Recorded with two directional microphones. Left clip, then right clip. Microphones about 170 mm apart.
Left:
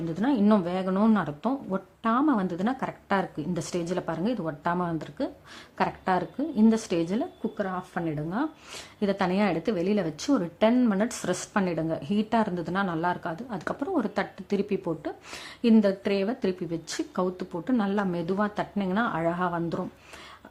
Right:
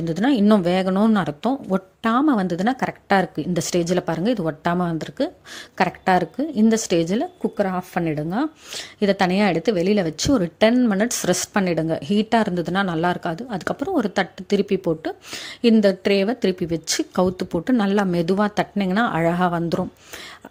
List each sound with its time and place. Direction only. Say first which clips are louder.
0.0 s a woman's voice: right 6 dB; 35° right (ahead or behind)